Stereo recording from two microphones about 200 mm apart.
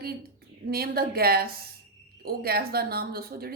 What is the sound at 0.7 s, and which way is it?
Speech, 50° right (ahead or behind).